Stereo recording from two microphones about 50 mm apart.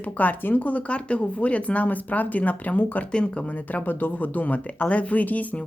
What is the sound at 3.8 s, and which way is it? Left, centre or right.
Speech, left.